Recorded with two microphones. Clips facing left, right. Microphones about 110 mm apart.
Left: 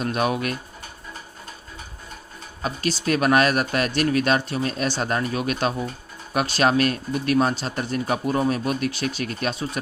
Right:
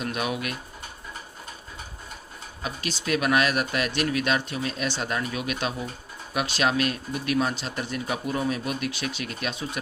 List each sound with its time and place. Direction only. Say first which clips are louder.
0.0 s speech: left 6 dB; 40° left (ahead or behind)
2.6 s speech: left 6 dB; 40° left (ahead or behind)